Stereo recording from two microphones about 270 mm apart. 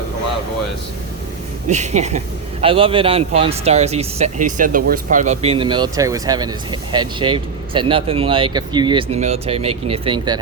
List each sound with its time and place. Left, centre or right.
1.6 s a man's voice: right